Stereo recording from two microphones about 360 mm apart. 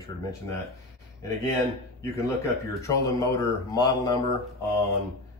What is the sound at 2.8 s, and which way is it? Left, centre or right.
Speech, centre.